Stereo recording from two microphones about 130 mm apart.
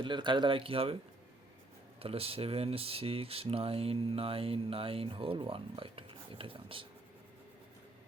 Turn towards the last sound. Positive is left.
turn(degrees=-45)  # may be behind; listen again after turning